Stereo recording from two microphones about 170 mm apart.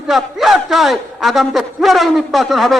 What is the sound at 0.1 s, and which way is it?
A man's voice, centre (ahead or behind).